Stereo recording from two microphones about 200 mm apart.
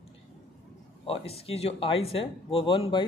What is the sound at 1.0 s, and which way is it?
Speech, 30° left (ahead or behind).